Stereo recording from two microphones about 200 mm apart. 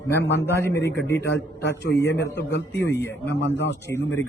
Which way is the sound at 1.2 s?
55° left (ahead or behind).